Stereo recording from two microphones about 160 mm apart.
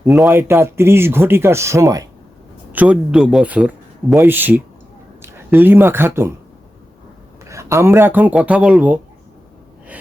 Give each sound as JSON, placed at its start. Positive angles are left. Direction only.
{"t": 0.3, "sound": "speech", "side_deg": -15}
{"t": 2.7, "sound": "speech", "side_deg": -5}
{"t": 7.4, "sound": "speech", "side_deg": -20}